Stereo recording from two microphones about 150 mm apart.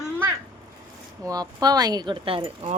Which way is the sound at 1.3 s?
25° right (ahead or behind).